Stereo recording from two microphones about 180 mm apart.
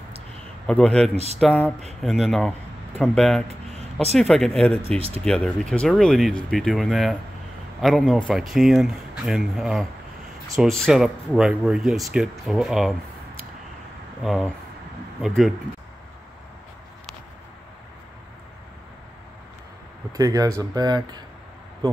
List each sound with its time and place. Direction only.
0.7 s speech: 5° left (ahead or behind)
1.1 s speech: 35° right (ahead or behind)
1.4 s speech: 5° left (ahead or behind)
4.8 s speech: 30° right (ahead or behind)
5.2 s speech: centre (ahead or behind)
14.2 s speech: centre (ahead or behind)
20.1 s speech: 20° right (ahead or behind)